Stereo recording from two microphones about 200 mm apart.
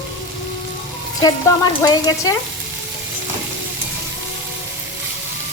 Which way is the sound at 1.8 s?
20° left (ahead or behind).